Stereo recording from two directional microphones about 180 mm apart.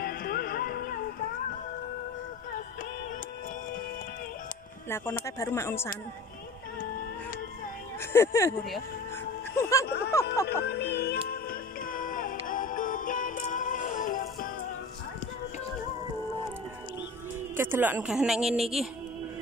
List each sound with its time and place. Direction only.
0.0 s music: 55° left (ahead or behind)
4.8 s speech: 15° left (ahead or behind)
8.0 s speech: 15° left (ahead or behind)
9.6 s a sound: 15° left (ahead or behind)
9.8 s speech: 60° left (ahead or behind)
10.3 s speech: 15° left (ahead or behind)
11.0 s music: 60° left (ahead or behind)
17.6 s a woman's voice: 10° right (ahead or behind)